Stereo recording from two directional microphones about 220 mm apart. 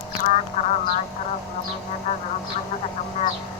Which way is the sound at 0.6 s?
30° left (ahead or behind).